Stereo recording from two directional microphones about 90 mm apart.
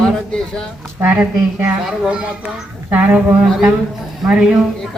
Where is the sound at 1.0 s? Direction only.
20° right (ahead or behind).